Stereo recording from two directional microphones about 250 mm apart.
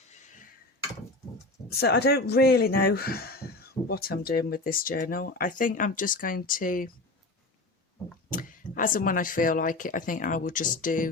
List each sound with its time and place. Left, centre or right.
1.7 s speech: left
8.3 s speech: left